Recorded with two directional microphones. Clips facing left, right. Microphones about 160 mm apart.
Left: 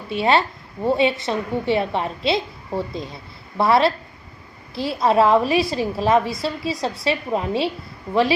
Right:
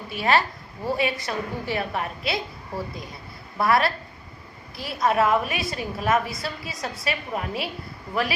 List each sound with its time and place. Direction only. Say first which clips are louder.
0.1 s a woman's voice: left 4 dB; 25° left (ahead or behind)